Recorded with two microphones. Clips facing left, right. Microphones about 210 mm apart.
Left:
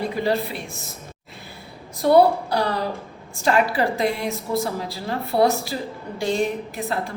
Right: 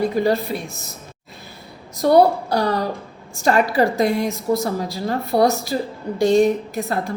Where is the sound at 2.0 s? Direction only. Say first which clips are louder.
Right 1 dB; 40° right (ahead or behind).